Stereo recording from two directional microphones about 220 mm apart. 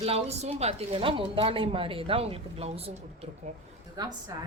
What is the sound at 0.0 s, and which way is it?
Speech, 30° right (ahead or behind).